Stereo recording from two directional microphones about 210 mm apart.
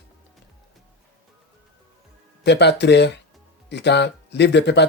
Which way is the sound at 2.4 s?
55° left (ahead or behind).